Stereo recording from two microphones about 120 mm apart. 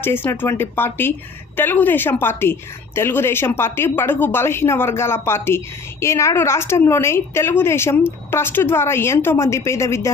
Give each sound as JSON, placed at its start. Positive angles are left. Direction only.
{"t": 0.0, "sound": "a woman's voice", "side_deg": 20}